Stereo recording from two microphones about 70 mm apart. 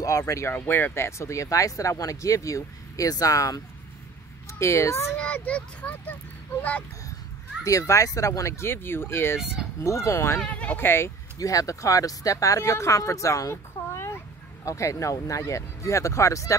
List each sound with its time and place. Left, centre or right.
0.0 s speech: left
0.5 s speech: left
4.6 s speech: left
5.1 s speech: left
7.6 s speech: left
9.8 s speech: left
10.4 s speech: centre
10.8 s speech: left
11.3 s speech: left
14.6 s speech: left